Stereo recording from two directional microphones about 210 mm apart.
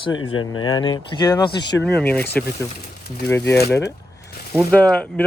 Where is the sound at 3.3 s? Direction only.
15° left (ahead or behind).